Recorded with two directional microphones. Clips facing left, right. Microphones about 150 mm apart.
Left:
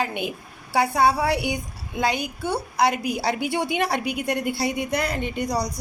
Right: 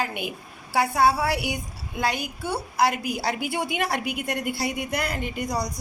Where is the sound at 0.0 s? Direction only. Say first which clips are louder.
Left 3 dB; 5° right (ahead or behind).